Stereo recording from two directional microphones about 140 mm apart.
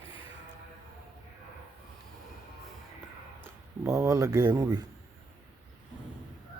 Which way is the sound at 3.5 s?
20° right (ahead or behind).